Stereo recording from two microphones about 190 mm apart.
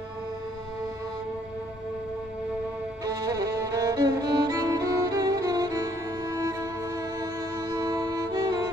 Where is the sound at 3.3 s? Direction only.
20° right (ahead or behind).